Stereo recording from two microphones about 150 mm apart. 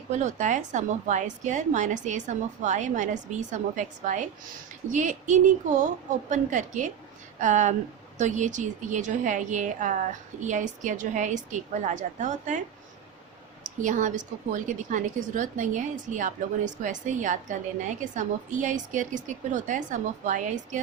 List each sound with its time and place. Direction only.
0.1 s a woman's voice: 55° right (ahead or behind)
13.8 s a woman's voice: 55° right (ahead or behind)